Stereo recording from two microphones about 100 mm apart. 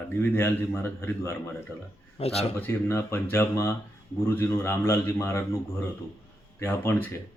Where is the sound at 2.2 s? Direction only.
85° left.